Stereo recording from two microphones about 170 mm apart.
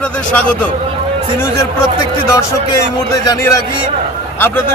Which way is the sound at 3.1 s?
20° left (ahead or behind).